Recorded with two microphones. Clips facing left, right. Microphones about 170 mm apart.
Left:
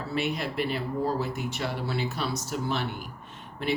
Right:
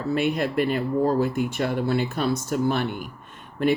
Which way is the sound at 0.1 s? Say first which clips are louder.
Right 7 dB; 50° right (ahead or behind).